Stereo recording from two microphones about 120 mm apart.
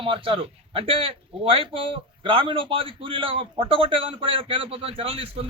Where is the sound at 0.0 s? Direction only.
45° right (ahead or behind).